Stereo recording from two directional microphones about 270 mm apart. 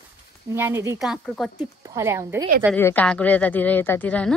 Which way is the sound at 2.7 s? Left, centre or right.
Centre.